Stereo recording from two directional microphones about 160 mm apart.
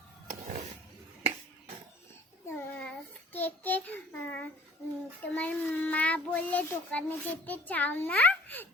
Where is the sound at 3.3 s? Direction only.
10° left (ahead or behind).